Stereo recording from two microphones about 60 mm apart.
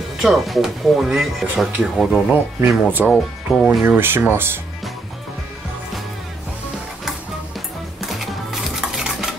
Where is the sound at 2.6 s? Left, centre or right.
Right.